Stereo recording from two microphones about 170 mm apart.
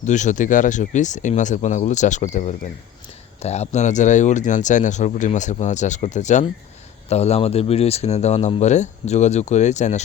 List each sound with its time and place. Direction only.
0.0 s speech: 45° left (ahead or behind)